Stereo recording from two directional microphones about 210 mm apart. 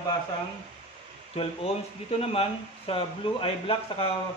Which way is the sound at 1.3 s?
30° left (ahead or behind).